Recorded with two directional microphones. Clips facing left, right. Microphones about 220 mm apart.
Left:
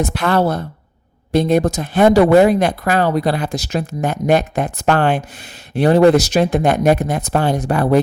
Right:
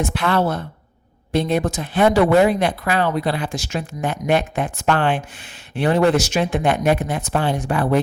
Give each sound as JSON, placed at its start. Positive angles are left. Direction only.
{"t": 0.0, "sound": "speech", "side_deg": 40}